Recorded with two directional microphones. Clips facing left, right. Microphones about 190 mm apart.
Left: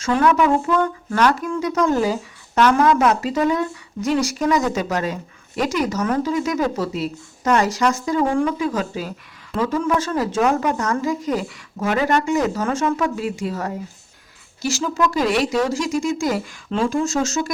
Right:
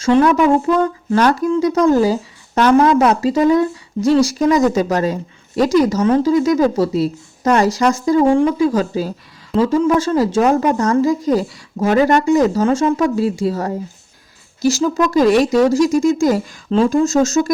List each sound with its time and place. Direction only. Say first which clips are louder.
0.0 s a woman's voice: right 5 dB; 30° right (ahead or behind)